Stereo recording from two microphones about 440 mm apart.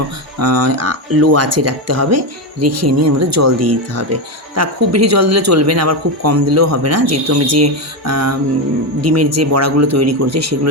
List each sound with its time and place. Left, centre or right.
0.3 s speech: right